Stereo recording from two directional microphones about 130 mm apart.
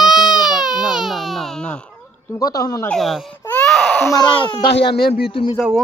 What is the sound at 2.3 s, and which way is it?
Speech, 30° left (ahead or behind).